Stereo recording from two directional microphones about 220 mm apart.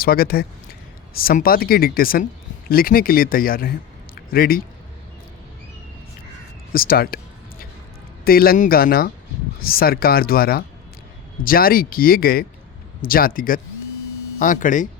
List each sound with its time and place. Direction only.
0.0 s speech: 45° left (ahead or behind)
6.7 s speech: 40° left (ahead or behind)
8.2 s speech: 40° left (ahead or behind)